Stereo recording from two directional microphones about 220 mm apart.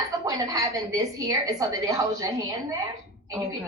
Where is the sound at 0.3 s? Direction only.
15° right (ahead or behind).